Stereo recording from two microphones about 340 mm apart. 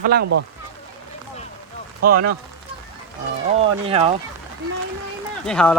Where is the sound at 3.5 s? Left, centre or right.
Centre.